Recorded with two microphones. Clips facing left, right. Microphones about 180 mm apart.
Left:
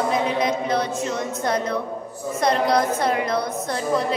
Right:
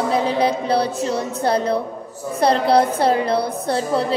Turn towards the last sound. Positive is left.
turn(degrees=-30)  # may be behind; listen again after turning